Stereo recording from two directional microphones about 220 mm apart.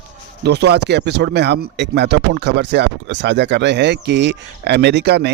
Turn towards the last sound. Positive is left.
turn(degrees=-50)  # may be behind; listen again after turning